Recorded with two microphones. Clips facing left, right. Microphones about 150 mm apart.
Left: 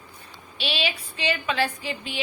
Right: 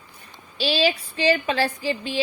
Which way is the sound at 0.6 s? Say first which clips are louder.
Right 7 dB; 35° right (ahead or behind).